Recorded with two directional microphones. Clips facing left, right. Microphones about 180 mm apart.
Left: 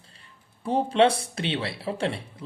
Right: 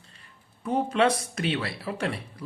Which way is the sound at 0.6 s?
30° left (ahead or behind).